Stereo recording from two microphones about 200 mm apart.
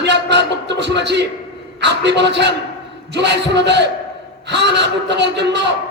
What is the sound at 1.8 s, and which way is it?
Speech, 60° right (ahead or behind).